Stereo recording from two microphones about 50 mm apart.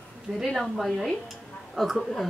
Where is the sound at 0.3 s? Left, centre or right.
Centre.